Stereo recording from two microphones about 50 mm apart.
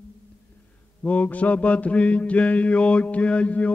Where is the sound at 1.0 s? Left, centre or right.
Left.